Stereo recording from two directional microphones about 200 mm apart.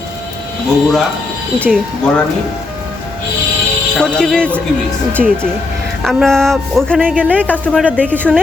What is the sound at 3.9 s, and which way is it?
Speech, 5° left (ahead or behind).